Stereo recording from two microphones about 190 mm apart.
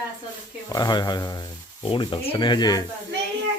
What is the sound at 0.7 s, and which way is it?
Speech, 20° left (ahead or behind).